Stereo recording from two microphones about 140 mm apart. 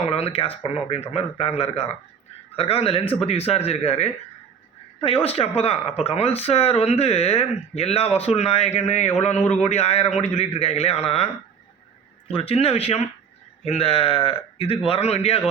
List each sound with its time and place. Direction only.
0.0 s speech: 45° left (ahead or behind)
12.3 s speech: 45° left (ahead or behind)